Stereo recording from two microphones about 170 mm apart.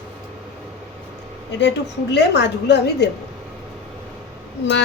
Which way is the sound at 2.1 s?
80° left.